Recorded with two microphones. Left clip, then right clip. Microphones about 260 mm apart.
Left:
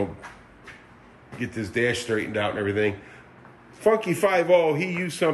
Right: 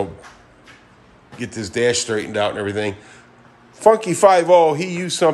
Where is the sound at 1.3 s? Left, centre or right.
Centre.